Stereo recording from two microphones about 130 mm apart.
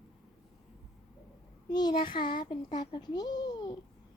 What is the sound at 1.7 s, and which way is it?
A child's voice, 35° left (ahead or behind).